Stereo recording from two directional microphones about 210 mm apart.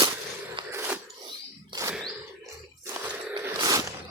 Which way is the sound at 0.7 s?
10° right (ahead or behind).